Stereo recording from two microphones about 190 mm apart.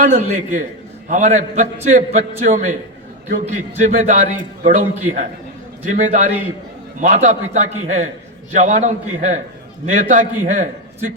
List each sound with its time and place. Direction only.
0.0 s a man's voice: 45° right (ahead or behind)